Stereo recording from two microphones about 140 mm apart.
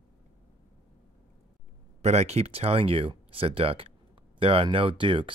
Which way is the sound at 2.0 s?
50° right (ahead or behind).